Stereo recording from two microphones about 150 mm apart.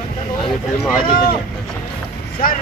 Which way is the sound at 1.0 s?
75° left (ahead or behind).